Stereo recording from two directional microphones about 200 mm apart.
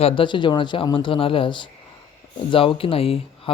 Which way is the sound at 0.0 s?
25° left (ahead or behind).